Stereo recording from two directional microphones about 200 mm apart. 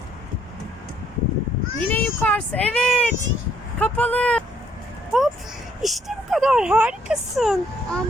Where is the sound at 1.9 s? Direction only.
10° left (ahead or behind).